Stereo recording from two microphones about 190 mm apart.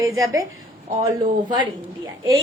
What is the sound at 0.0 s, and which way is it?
Speech, 15° right (ahead or behind).